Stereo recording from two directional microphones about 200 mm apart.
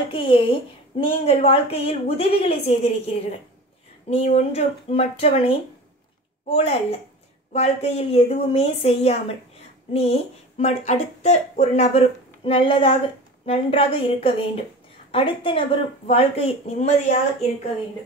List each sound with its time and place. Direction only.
0.1 s a woman's voice: 25° left (ahead or behind)